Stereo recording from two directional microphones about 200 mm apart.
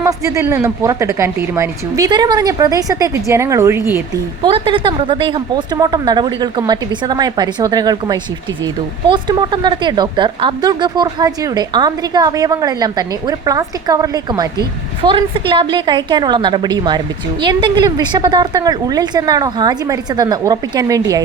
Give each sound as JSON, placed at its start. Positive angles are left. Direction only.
{"t": 0.0, "sound": "a woman's voice", "side_deg": -15}
{"t": 4.4, "sound": "speech", "side_deg": -25}